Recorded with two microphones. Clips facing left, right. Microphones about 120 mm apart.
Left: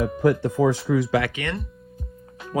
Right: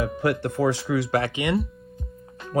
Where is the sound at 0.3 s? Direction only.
85° right.